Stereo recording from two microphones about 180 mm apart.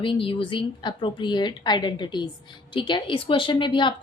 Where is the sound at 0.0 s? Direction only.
30° left (ahead or behind).